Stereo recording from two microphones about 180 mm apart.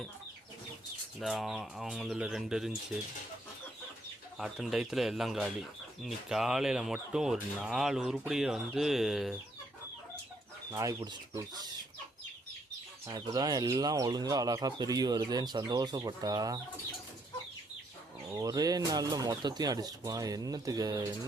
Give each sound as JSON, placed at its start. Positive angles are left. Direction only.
{"t": 1.2, "sound": "speech", "side_deg": 0}
{"t": 4.4, "sound": "speech", "side_deg": 0}
{"t": 10.7, "sound": "speech", "side_deg": -20}
{"t": 13.1, "sound": "speech", "side_deg": -20}
{"t": 18.3, "sound": "speech", "side_deg": -20}